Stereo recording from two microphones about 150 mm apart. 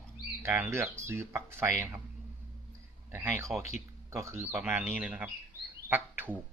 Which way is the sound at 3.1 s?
15° right (ahead or behind).